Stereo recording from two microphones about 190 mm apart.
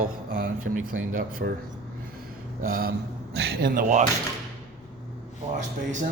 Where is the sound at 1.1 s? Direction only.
50° right (ahead or behind).